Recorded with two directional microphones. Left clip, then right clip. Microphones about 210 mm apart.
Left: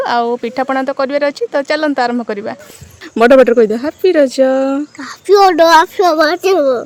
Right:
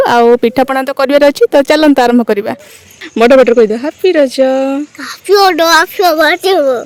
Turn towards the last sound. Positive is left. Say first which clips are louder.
# right 2 dB
turn(degrees=0)  # may be behind; listen again after turning